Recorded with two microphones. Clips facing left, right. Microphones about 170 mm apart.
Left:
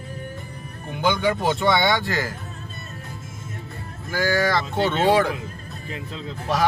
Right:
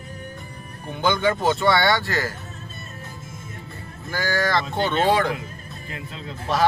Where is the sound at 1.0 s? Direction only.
10° left (ahead or behind).